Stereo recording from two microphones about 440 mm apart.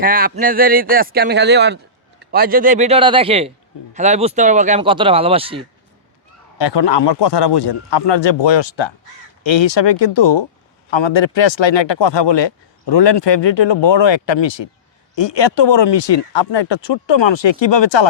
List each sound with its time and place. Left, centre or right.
0.0 s speech: centre
6.6 s a man's voice: left
10.9 s speech: left